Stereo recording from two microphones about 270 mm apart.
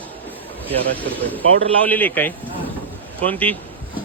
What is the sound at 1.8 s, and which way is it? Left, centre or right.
Speech, centre.